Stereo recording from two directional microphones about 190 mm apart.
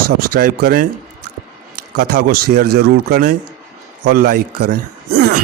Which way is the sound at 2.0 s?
50° right (ahead or behind).